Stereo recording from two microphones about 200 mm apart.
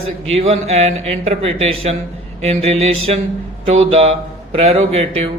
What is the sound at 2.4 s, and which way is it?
Mantra, 30° right (ahead or behind).